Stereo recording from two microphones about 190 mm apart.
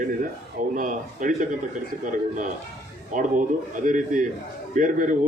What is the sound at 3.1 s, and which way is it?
A man's voice, 45° right (ahead or behind).